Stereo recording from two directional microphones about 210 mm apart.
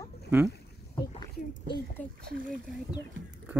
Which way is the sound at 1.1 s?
30° left (ahead or behind).